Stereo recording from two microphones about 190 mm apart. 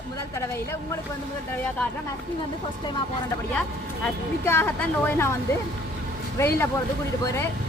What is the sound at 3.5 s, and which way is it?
Speech, 5° left (ahead or behind).